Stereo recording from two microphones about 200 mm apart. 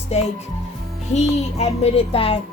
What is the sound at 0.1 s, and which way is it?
A woman's voice, 30° left (ahead or behind).